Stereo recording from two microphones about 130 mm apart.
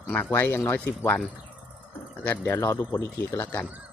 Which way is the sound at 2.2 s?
15° left (ahead or behind).